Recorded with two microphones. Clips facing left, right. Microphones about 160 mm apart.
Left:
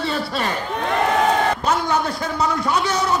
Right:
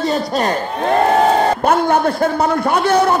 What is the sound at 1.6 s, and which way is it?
A man's voice, 55° right (ahead or behind).